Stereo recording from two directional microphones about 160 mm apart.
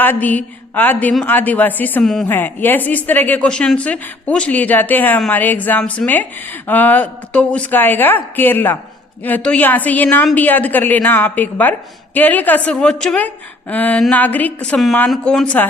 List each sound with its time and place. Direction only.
0.0 s a woman's voice: 10° left (ahead or behind)